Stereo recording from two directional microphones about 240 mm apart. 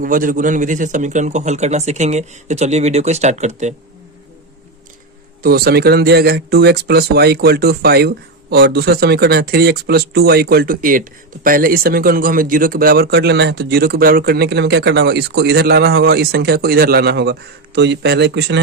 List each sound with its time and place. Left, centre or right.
0.0 s a man's voice: right
5.4 s speech: right